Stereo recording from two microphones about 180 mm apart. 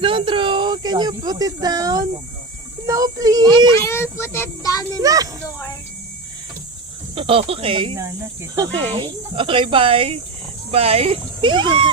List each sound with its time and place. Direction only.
0.0 s speech: 30° right (ahead or behind)
3.7 s a child's voice: 15° left (ahead or behind)
4.9 s speech: 20° right (ahead or behind)
7.2 s speech: 30° right (ahead or behind)
9.0 s speech: 25° right (ahead or behind)